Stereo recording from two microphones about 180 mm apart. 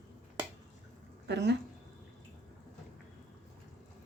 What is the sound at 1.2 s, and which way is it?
Speech, 70° right (ahead or behind).